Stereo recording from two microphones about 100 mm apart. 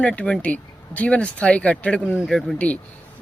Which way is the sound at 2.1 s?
Centre (ahead or behind).